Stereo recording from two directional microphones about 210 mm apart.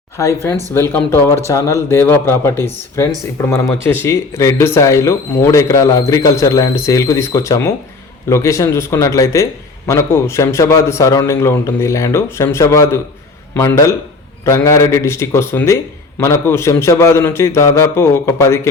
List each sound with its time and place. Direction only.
0.2 s a man's voice: 15° left (ahead or behind)